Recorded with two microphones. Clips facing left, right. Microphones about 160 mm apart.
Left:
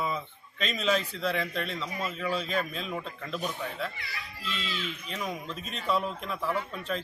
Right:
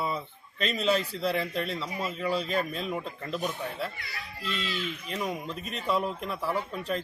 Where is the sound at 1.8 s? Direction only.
10° right (ahead or behind).